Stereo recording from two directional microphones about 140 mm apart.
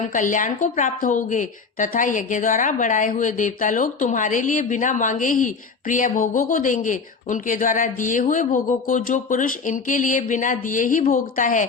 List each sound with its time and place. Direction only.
0.1 s a woman's voice: 65° left (ahead or behind)